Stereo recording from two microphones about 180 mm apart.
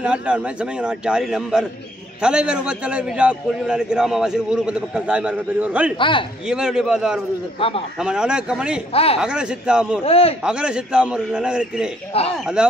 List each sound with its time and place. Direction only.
0.0 s a man's voice: 5° right (ahead or behind)
5.9 s a man's voice: 30° left (ahead or behind)
6.4 s a man's voice: 5° right (ahead or behind)
7.6 s speech: 30° left (ahead or behind)
8.0 s a man's voice: 5° right (ahead or behind)
8.9 s speech: 35° left (ahead or behind)
9.2 s a man's voice: 5° right (ahead or behind)
10.0 s speech: 35° left (ahead or behind)
10.4 s a man's voice: 5° right (ahead or behind)
12.1 s speech: 35° left (ahead or behind)
12.6 s a man's voice: 5° right (ahead or behind)